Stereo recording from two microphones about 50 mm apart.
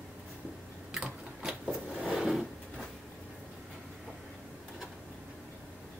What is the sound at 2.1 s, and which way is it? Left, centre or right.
Drawer open or close, centre.